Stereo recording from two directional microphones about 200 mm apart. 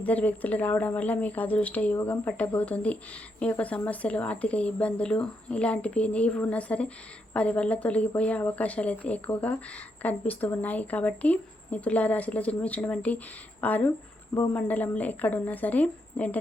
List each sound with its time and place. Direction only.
0.0 s a woman's voice: 10° left (ahead or behind)